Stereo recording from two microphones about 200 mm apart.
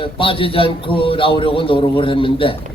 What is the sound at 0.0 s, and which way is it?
A man's voice, 25° left (ahead or behind).